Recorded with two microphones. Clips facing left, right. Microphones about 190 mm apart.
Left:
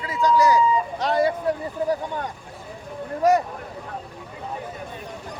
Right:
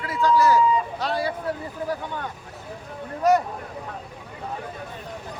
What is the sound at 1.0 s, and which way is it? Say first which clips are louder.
Vehicle: left 5 dB; 15° left (ahead or behind).